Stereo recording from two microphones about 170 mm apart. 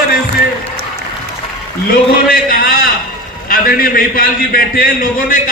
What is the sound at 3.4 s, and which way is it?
A man's voice, 55° left (ahead or behind).